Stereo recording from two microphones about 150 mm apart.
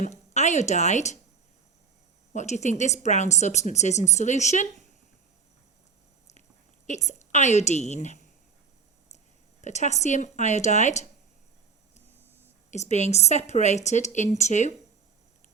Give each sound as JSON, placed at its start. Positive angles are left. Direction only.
{"t": 0.3, "sound": "a woman's voice", "side_deg": 50}
{"t": 2.3, "sound": "a woman's voice", "side_deg": 50}
{"t": 6.8, "sound": "a woman's voice", "side_deg": 50}
{"t": 9.6, "sound": "a woman's voice", "side_deg": 50}
{"t": 12.7, "sound": "a woman's voice", "side_deg": 50}